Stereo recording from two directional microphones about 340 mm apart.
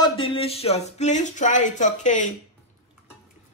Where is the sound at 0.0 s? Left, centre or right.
Centre.